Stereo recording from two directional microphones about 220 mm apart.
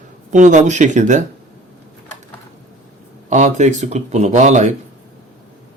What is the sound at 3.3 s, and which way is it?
Speech, 30° right (ahead or behind).